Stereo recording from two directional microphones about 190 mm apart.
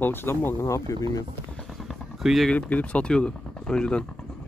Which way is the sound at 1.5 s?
Centre (ahead or behind).